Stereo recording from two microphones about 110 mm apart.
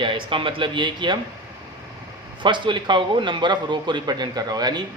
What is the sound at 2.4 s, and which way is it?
A man's voice, 45° right (ahead or behind).